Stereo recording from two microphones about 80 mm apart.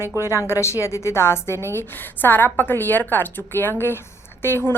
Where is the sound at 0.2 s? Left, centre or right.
Left.